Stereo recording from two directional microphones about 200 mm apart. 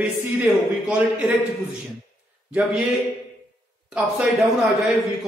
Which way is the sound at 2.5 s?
5° right (ahead or behind).